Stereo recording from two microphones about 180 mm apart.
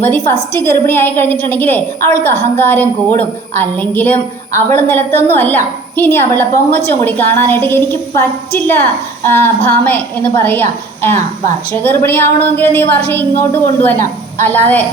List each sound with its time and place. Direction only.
0.0 s a woman's voice: 10° left (ahead or behind)